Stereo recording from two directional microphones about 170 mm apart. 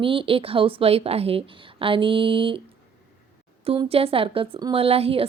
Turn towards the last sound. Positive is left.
turn(degrees=-35)  # may be behind; listen again after turning